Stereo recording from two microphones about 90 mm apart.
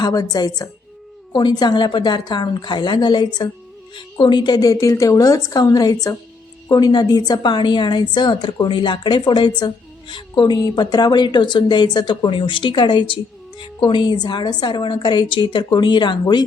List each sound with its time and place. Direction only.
0.0 s a woman's voice: 45° left (ahead or behind)